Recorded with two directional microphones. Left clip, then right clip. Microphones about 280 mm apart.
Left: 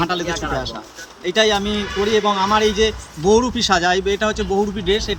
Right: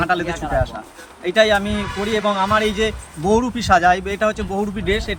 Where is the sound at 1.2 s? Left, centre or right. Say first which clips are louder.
Right 1 dB; centre.